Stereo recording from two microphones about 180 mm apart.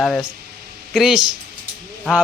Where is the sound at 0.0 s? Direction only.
5° left (ahead or behind).